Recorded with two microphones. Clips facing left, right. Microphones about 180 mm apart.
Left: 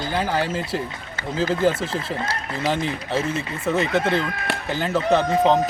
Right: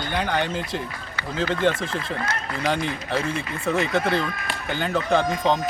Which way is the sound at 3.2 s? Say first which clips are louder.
Left 1 dB; centre (ahead or behind).